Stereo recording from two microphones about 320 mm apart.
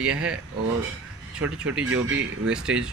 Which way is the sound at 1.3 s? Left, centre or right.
Centre.